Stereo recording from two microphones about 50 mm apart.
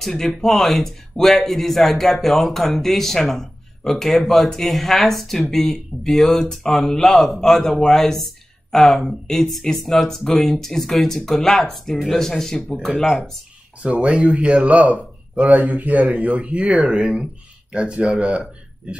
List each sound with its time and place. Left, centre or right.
0.0 s speech: centre
13.8 s a man's voice: right
16.2 s speech: right